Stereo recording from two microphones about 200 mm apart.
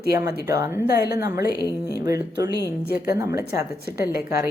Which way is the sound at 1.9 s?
15° right (ahead or behind).